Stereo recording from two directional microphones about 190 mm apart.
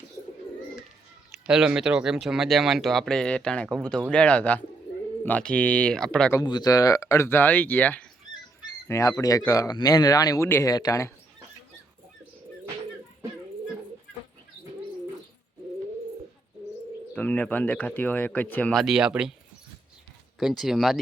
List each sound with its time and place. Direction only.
1.3 s speech: 5° right (ahead or behind)
6.4 s speech: 20° left (ahead or behind)
17.2 s speech: 10° left (ahead or behind)
20.4 s speech: centre (ahead or behind)